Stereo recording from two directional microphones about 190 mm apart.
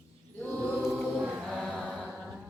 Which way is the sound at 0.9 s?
5° right (ahead or behind).